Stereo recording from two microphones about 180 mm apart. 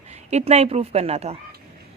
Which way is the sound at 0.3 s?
35° right (ahead or behind).